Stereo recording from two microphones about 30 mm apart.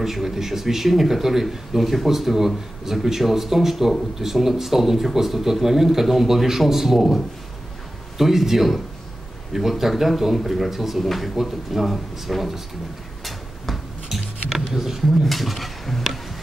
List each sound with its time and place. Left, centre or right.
0.0 s speech: centre
8.2 s a man's voice: centre
11.0 s a man's voice: centre
14.0 s a sound: centre
14.8 s speech: centre